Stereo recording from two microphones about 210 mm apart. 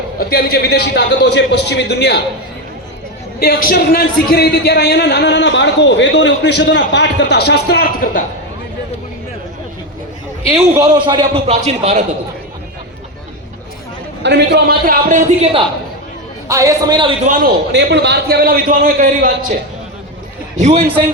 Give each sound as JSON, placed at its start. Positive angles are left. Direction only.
{"t": 0.2, "sound": "a man's voice", "side_deg": 45}
{"t": 3.4, "sound": "a man's voice", "side_deg": 45}
{"t": 10.5, "sound": "a man's voice", "side_deg": -15}
{"t": 14.2, "sound": "a man's voice", "side_deg": -55}
{"t": 16.5, "sound": "a man's voice", "side_deg": -15}
{"t": 17.2, "sound": "a man's voice", "side_deg": -40}
{"t": 17.7, "sound": "a man's voice", "side_deg": -55}
{"t": 20.6, "sound": "a man's voice", "side_deg": -30}